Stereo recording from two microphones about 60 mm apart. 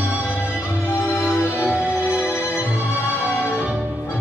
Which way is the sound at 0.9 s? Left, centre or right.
Left.